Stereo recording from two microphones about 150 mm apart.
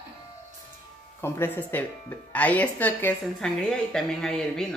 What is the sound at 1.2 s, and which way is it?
A woman's voice, 15° left (ahead or behind).